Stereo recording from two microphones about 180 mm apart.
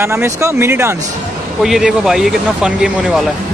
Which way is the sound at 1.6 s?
5° right (ahead or behind).